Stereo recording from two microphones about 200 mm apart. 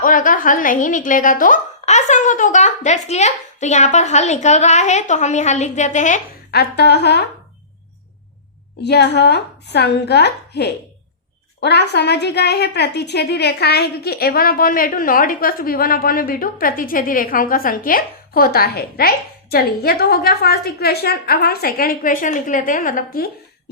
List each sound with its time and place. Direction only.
0.0 s speech: 40° left (ahead or behind)
6.5 s a woman's voice: 55° left (ahead or behind)
8.8 s a woman's voice: 55° left (ahead or behind)